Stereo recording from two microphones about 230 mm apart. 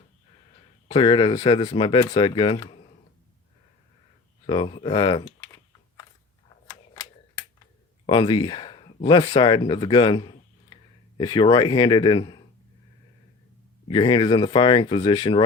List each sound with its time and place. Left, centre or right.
0.9 s speech: left
4.4 s speech: left
6.7 s a sound: centre
8.0 s speech: left
13.8 s speech: left